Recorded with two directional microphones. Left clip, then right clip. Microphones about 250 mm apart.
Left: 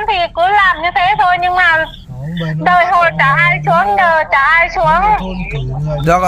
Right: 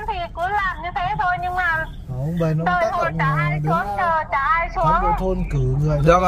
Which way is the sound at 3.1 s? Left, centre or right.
Left.